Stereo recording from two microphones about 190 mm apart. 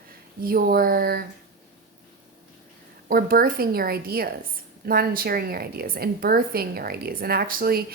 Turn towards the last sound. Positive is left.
turn(degrees=-55)  # may be behind; listen again after turning